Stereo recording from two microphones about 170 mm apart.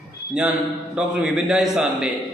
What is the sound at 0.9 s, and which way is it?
A man's voice, 5° right (ahead or behind).